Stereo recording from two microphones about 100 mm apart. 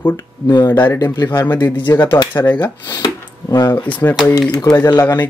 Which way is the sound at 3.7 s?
20° left (ahead or behind).